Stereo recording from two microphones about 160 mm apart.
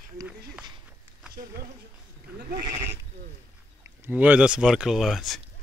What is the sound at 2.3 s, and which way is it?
Goat, 70° right (ahead or behind).